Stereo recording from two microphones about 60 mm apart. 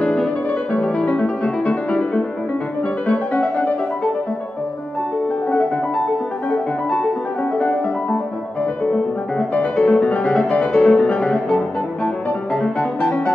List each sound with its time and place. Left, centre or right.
0.0 s music: centre
9.5 s music: left
12.5 s music: centre